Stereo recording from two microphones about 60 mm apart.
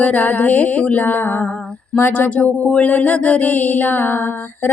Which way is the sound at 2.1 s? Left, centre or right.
Left.